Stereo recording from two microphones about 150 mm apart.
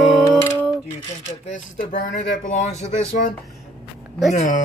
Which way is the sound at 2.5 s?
50° left (ahead or behind).